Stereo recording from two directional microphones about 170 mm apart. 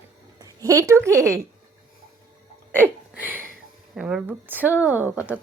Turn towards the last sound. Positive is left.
turn(degrees=-10)  # may be behind; listen again after turning